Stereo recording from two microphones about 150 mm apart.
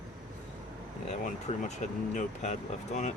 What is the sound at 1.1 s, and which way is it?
Speech, 55° left (ahead or behind).